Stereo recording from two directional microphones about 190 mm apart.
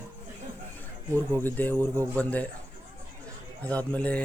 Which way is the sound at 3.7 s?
5° left (ahead or behind).